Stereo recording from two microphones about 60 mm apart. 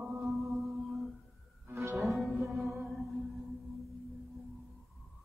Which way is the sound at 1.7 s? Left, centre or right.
Right.